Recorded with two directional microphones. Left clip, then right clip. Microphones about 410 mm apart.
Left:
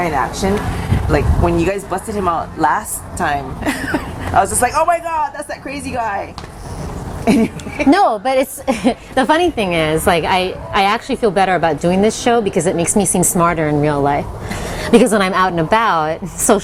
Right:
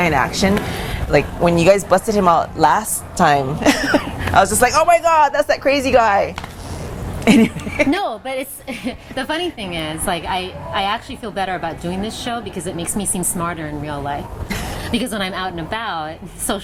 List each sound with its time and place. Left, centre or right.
0.4 s speech: right
7.3 s a woman's voice: right
7.9 s a woman's voice: left